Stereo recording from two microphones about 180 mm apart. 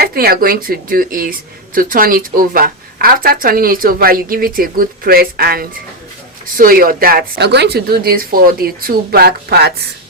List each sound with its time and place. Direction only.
0.0 s speech: 55° right (ahead or behind)